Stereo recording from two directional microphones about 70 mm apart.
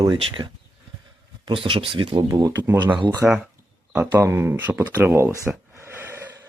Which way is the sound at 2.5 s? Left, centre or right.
Right.